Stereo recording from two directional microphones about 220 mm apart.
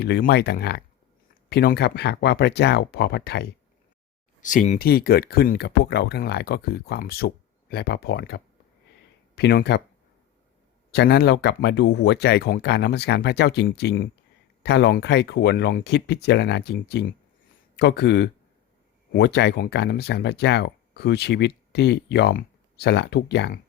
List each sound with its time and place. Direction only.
0.0 s speech: 45° left (ahead or behind)
4.4 s speech: 35° left (ahead or behind)
10.9 s speech: 50° left (ahead or behind)